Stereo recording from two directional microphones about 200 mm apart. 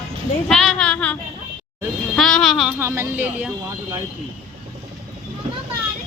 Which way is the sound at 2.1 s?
Centre (ahead or behind).